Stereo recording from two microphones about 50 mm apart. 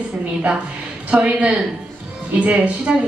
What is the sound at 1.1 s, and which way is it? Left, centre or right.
A woman's voice, right.